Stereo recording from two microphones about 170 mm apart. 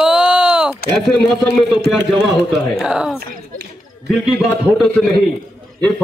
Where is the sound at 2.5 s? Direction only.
5° right (ahead or behind).